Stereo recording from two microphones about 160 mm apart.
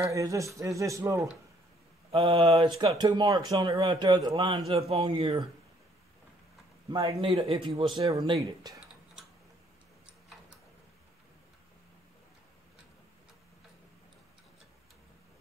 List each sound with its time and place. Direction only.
0.1 s a man's voice: 20° right (ahead or behind)
2.1 s a man's voice: 35° right (ahead or behind)
4.6 s a man's voice: 40° right (ahead or behind)
6.9 s a man's voice: 25° right (ahead or behind)